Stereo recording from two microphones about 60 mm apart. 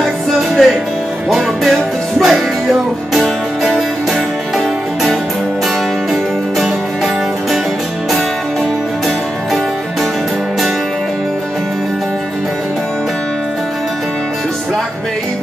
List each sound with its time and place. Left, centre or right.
0.0 s music: centre